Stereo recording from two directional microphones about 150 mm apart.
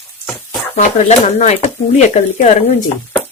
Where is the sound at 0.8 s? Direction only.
50° left (ahead or behind).